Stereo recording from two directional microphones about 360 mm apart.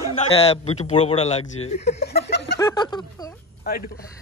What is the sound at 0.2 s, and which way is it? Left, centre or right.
A man's voice, centre.